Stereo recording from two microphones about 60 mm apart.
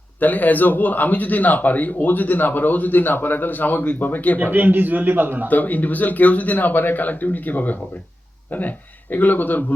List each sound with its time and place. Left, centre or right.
0.2 s a man's voice: left
4.4 s a man's voice: right
5.5 s a man's voice: left
9.1 s speech: left